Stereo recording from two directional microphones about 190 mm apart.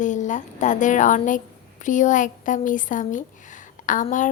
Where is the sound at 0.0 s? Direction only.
40° left (ahead or behind).